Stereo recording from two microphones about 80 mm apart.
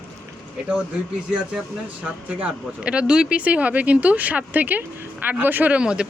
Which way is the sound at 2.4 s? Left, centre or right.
Centre.